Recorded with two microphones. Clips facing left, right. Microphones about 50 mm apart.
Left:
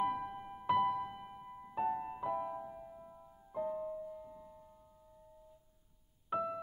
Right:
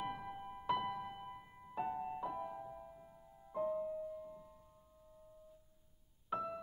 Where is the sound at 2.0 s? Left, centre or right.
Centre.